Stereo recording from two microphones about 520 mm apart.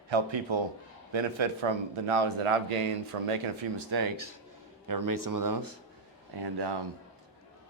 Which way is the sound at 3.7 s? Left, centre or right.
Right.